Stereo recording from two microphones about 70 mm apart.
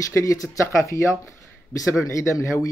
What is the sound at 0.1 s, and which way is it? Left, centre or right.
A man's voice, left.